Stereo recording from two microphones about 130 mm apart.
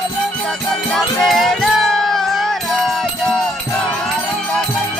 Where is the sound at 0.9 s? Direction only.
5° left (ahead or behind).